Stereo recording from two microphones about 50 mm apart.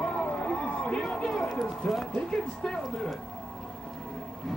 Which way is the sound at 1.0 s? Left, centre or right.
Centre.